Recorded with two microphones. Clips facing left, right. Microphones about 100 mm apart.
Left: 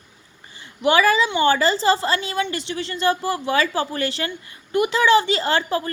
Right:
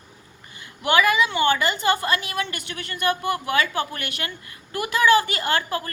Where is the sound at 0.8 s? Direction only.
30° left (ahead or behind).